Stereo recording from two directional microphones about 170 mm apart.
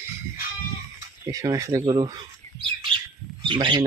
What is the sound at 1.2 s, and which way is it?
Speech, 20° right (ahead or behind).